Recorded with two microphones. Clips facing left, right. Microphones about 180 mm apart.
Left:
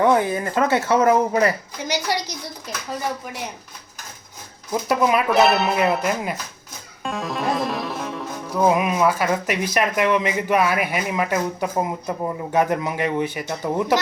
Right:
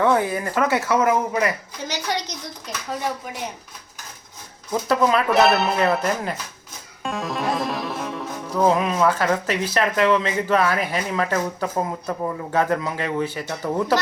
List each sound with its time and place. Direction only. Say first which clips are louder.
0.0 s speech: left 2 dB; 20° left (ahead or behind)
1.9 s music: left 3 dB; 10° left (ahead or behind)
4.7 s music: even; 10° left (ahead or behind)
5.3 s speech: even; centre (ahead or behind)
7.0 s music: even; centre (ahead or behind); by 14.0 s 15° left (ahead or behind)